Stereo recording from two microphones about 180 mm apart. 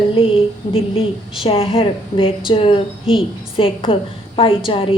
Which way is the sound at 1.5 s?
30° left (ahead or behind).